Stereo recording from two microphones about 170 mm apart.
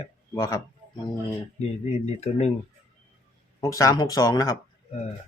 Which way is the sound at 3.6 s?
20° left (ahead or behind).